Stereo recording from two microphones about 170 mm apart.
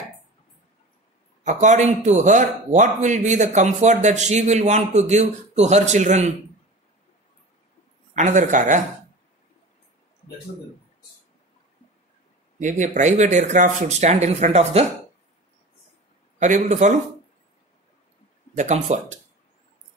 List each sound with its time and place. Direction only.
1.4 s a man's voice: 45° right (ahead or behind)
8.1 s a man's voice: 45° right (ahead or behind)
12.5 s a man's voice: 45° right (ahead or behind)
16.3 s a man's voice: 45° right (ahead or behind)
18.6 s a man's voice: 45° right (ahead or behind)